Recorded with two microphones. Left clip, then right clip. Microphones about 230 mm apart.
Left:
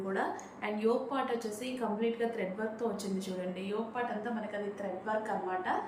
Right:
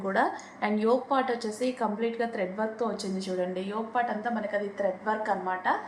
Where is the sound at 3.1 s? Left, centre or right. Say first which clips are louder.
Right 7 dB; right.